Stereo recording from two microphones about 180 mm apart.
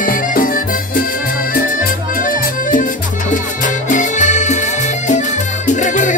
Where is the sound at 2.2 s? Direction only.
50° left (ahead or behind).